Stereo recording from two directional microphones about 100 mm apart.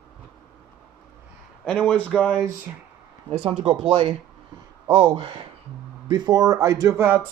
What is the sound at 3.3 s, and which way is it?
Speech, 75° right (ahead or behind).